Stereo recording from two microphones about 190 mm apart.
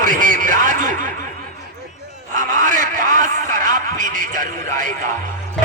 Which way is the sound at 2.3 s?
45° right (ahead or behind).